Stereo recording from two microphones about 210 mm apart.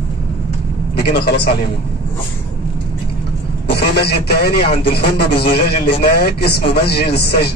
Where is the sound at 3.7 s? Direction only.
50° left (ahead or behind).